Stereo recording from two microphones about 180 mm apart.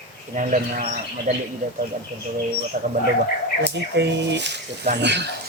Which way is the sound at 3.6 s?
70° right (ahead or behind).